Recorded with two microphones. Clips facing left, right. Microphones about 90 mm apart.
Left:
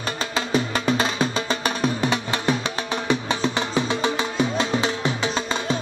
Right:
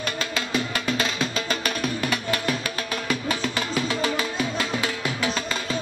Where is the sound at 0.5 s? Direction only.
30° left (ahead or behind).